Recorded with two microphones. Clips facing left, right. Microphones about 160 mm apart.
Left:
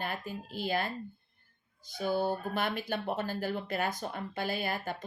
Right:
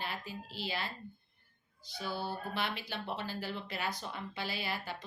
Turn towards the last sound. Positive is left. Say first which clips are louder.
# left 5 dB
turn(degrees=50)  # may be behind; listen again after turning